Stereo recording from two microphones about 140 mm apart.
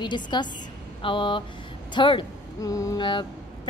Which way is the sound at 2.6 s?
25° left (ahead or behind).